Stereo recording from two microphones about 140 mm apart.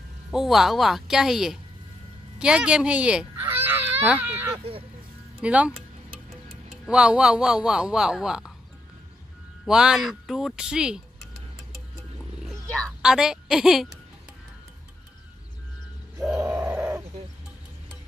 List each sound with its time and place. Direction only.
0.3 s a man's voice: centre (ahead or behind)
6.9 s a man's voice: 5° right (ahead or behind)
9.7 s a man's voice: 5° right (ahead or behind)
13.0 s a man's voice: 5° right (ahead or behind)
16.3 s bird: 20° right (ahead or behind)